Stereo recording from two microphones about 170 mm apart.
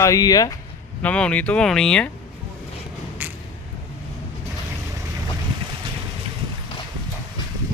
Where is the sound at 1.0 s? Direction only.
5° left (ahead or behind).